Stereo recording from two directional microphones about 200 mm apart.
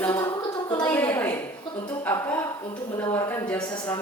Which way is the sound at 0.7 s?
20° left (ahead or behind).